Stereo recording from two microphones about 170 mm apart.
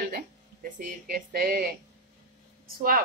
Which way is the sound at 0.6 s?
55° right (ahead or behind).